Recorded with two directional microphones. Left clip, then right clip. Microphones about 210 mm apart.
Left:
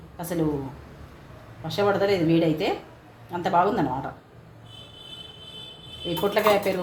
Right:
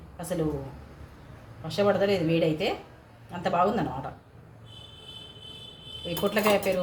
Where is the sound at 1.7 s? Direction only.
15° left (ahead or behind).